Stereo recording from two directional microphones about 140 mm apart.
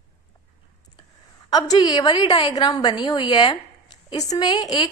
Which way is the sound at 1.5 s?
30° left (ahead or behind).